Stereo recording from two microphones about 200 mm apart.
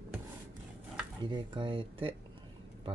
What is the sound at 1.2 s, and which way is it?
Speech, 25° right (ahead or behind).